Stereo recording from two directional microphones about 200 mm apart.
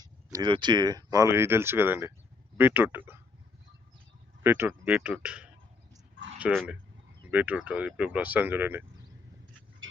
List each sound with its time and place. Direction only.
0.0 s speech: 20° right (ahead or behind)
4.4 s speech: 10° right (ahead or behind)